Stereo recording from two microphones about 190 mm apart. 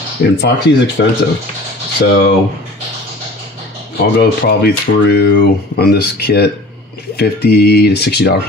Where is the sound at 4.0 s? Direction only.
55° left (ahead or behind).